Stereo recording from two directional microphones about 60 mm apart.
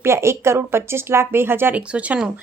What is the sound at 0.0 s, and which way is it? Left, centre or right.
Speech, right.